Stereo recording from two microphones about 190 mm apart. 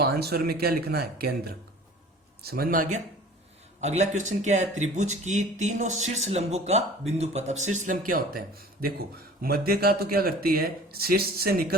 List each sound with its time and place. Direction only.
0.0 s speech: 55° right (ahead or behind)
3.8 s speech: 35° right (ahead or behind); by 11.8 s 55° right (ahead or behind)